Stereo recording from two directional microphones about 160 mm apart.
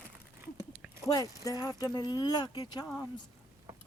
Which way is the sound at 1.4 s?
20° left (ahead or behind).